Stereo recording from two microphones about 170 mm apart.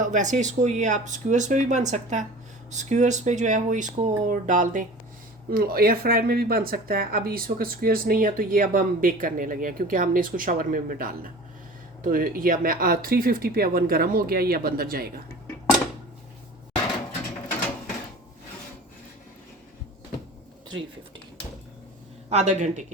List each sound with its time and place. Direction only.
0.0 s speech: 45° right (ahead or behind)
5.5 s speech: 60° right (ahead or behind)
22.3 s speech: 40° right (ahead or behind)